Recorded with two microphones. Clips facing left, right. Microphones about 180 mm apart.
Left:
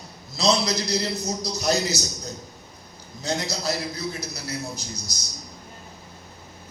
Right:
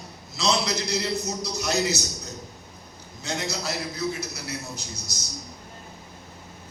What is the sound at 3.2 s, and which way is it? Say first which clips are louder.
A man's voice: left 2 dB; 35° left (ahead or behind).